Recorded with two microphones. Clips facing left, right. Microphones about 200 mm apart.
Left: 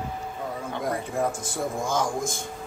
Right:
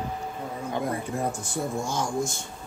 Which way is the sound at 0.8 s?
90° left.